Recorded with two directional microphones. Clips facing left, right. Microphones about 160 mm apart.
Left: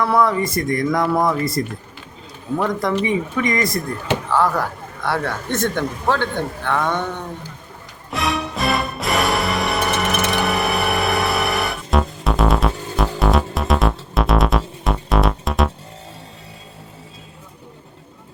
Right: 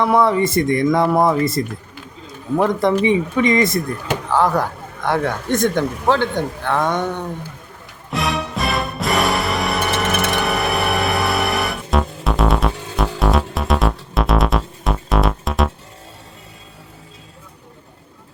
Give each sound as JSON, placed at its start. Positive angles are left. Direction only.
{"t": 0.0, "sound": "speech", "side_deg": -20}
{"t": 3.0, "sound": "speech", "side_deg": -20}
{"t": 8.1, "sound": "music", "side_deg": 0}